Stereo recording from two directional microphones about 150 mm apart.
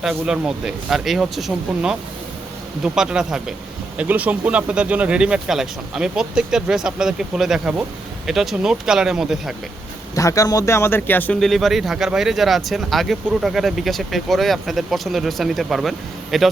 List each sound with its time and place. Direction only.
0.0 s speech: 5° right (ahead or behind)
10.2 s speech: 20° left (ahead or behind)
11.3 s speech: centre (ahead or behind)